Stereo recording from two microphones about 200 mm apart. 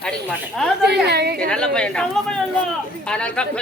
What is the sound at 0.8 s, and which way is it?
Speech, 55° right (ahead or behind).